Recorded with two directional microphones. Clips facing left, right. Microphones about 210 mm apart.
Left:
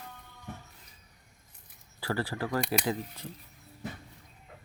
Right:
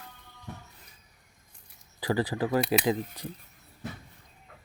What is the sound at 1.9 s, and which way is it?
Speech, 15° right (ahead or behind).